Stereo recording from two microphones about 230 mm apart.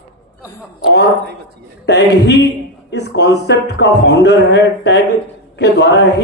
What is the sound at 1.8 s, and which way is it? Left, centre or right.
Speech, left.